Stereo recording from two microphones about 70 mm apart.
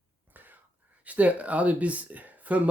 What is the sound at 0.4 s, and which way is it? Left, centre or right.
Whispering, right.